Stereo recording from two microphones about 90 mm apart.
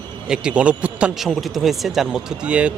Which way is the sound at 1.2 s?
Centre (ahead or behind).